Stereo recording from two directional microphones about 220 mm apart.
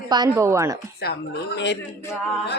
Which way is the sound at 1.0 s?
50° left (ahead or behind).